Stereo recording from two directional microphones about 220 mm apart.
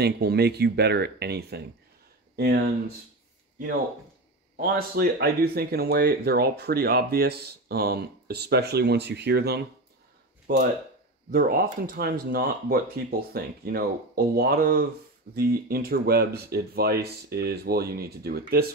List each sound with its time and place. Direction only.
0.0 s speech: 45° right (ahead or behind)
4.6 s speech: 40° right (ahead or behind)